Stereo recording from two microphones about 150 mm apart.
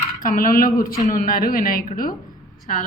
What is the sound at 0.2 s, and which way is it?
A woman's voice, 65° left (ahead or behind).